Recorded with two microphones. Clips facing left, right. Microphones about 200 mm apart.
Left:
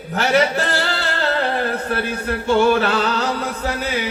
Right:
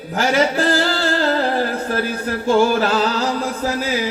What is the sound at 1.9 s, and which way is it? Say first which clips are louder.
A man's voice: right 1 dB; 40° right (ahead or behind).